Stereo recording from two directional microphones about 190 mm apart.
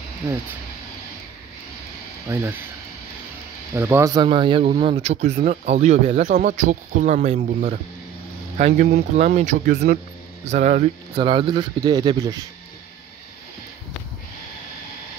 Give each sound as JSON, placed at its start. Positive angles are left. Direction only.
{"t": 3.7, "sound": "speech", "side_deg": -15}
{"t": 11.1, "sound": "speech", "side_deg": -25}